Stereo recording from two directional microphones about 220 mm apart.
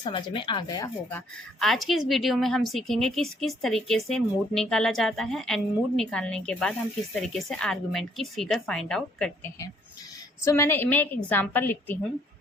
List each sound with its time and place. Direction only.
0.0 s speech: 20° left (ahead or behind)
1.5 s a woman's voice: centre (ahead or behind)
10.4 s a woman's voice: 10° left (ahead or behind)